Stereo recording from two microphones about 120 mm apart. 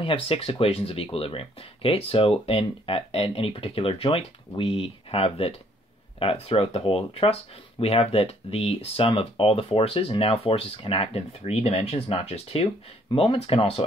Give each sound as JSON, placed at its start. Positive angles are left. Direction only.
{"t": 0.0, "sound": "speech", "side_deg": 50}
{"t": 13.1, "sound": "speech", "side_deg": 50}